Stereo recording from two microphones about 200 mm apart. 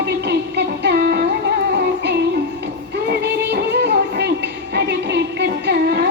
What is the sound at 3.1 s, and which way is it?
Music, 55° right (ahead or behind).